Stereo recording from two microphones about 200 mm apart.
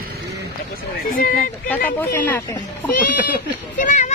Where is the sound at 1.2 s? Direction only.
45° left (ahead or behind).